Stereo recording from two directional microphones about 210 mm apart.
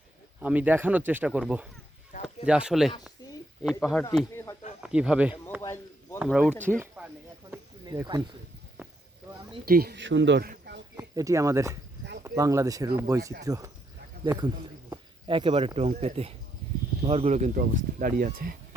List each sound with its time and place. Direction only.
0.4 s speech: 5° right (ahead or behind)
5.6 s a sound: 10° left (ahead or behind)
6.1 s speech: centre (ahead or behind)
7.9 s speech: 20° right (ahead or behind)
9.6 s speech: 45° right (ahead or behind)
10.9 s speech: 15° right (ahead or behind); by 18.5 s 40° right (ahead or behind)